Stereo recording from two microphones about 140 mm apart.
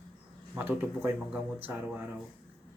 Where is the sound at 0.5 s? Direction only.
15° right (ahead or behind).